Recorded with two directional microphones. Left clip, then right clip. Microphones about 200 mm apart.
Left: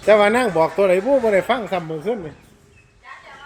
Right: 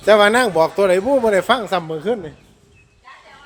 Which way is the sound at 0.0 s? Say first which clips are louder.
Right 2 dB; 25° right (ahead or behind).